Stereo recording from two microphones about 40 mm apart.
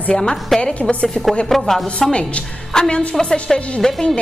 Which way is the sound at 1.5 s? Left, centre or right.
Centre.